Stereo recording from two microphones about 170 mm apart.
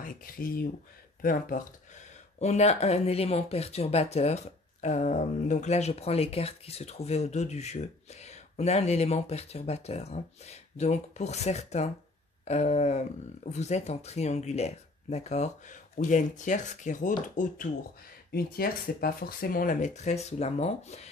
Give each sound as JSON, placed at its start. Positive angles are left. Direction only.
{"t": 0.0, "sound": "speech", "side_deg": 60}
{"t": 18.3, "sound": "speech", "side_deg": 65}